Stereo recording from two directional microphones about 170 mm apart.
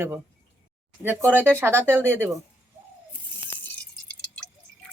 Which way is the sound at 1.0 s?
10° right (ahead or behind).